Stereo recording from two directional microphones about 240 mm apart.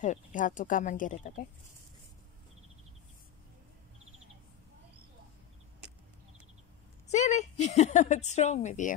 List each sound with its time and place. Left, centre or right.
0.0 s speech: left
7.1 s a woman's voice: left